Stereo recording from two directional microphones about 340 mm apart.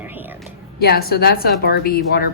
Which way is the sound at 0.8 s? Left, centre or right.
Left.